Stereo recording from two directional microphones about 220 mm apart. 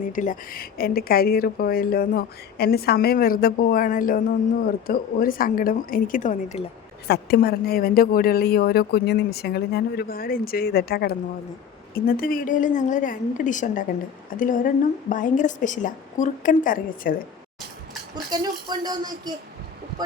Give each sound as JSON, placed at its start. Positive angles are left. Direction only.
{"t": 0.0, "sound": "a woman's voice", "side_deg": 35}
{"t": 7.1, "sound": "a woman's voice", "side_deg": 45}
{"t": 18.1, "sound": "speech", "side_deg": -20}